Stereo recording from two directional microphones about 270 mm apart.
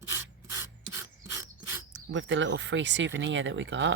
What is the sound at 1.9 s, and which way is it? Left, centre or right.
Speech, right.